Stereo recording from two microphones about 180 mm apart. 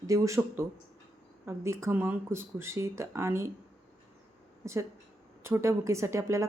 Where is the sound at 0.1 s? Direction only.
15° right (ahead or behind).